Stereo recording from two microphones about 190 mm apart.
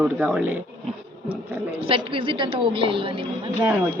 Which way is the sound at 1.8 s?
25° right (ahead or behind).